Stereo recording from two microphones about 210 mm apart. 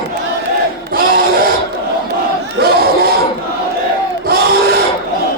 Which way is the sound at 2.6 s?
45° right (ahead or behind).